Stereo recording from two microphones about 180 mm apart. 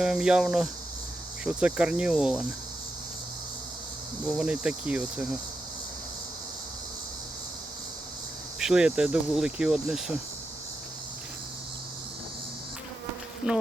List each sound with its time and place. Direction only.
0.0 s speech: 5° right (ahead or behind)
4.3 s speech: 5° right (ahead or behind)
8.5 s speech: 5° right (ahead or behind)
13.5 s speech: 5° right (ahead or behind)